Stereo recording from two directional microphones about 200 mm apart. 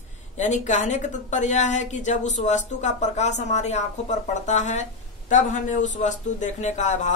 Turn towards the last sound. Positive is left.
turn(degrees=35)  # may be behind; listen again after turning